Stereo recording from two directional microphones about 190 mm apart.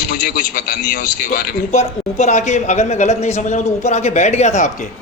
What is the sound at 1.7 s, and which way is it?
Speech, 35° left (ahead or behind).